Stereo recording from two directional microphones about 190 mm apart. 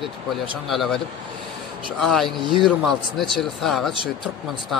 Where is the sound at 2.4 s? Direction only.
25° right (ahead or behind).